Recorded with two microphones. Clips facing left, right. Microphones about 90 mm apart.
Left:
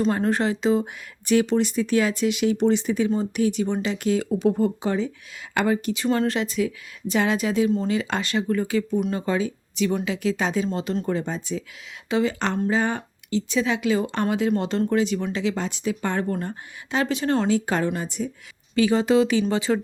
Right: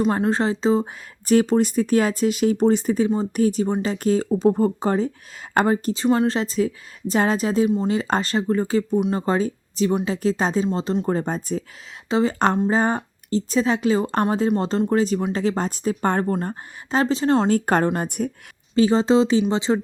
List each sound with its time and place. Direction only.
0.2 s speech: 30° right (ahead or behind)
6.1 s speech: 25° right (ahead or behind)
17.5 s a woman's voice: 50° right (ahead or behind)
18.7 s speech: 30° right (ahead or behind)